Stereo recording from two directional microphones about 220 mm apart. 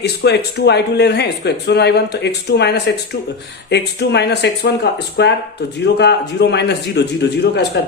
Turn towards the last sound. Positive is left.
turn(degrees=50)  # may be behind; listen again after turning